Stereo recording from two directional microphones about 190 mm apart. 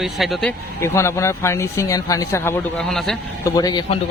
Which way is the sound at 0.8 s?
15° left (ahead or behind).